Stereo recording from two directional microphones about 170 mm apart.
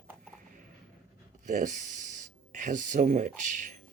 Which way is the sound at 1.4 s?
45° right (ahead or behind).